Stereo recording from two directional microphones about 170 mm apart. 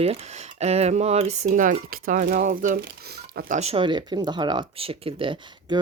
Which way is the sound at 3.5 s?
35° right (ahead or behind).